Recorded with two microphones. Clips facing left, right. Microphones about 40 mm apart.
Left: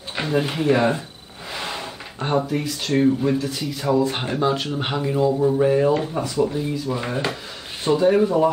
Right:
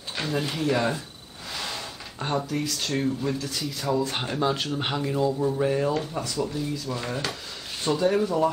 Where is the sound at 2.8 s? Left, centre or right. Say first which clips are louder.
Left 11 dB; centre.